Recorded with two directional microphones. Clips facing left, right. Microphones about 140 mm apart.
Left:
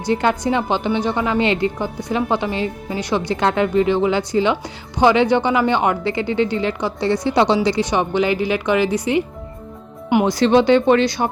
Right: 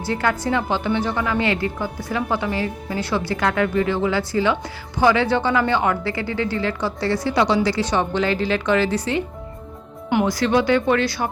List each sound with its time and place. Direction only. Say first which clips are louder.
0.0 s a woman's voice: left 4 dB; 20° left (ahead or behind)